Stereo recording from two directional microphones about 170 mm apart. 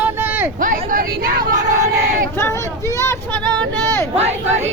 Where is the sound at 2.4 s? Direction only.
15° left (ahead or behind).